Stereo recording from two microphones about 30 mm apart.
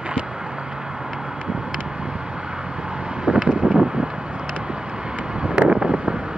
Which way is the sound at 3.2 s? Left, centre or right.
Right.